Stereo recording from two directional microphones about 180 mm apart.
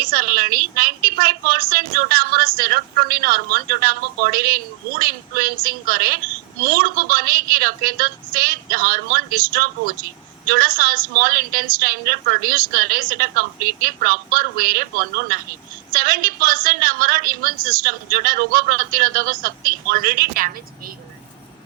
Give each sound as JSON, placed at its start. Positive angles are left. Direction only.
{"t": 0.0, "sound": "a woman's voice", "side_deg": -55}